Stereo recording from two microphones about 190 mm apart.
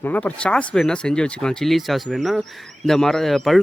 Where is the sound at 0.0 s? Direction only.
10° left (ahead or behind).